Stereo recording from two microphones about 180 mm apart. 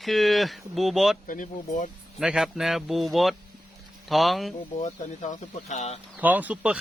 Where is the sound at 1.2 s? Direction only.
45° left (ahead or behind).